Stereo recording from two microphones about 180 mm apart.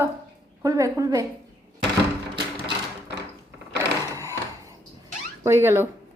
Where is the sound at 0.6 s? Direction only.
20° right (ahead or behind).